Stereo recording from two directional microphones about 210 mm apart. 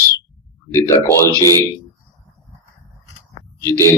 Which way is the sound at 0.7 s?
15° left (ahead or behind).